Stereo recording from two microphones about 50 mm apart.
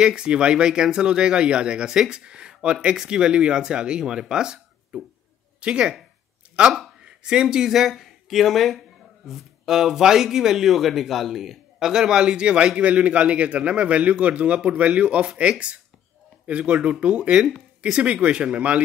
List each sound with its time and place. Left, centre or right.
0.0 s a man's voice: centre
6.4 s a sound: right
7.1 s a man's voice: centre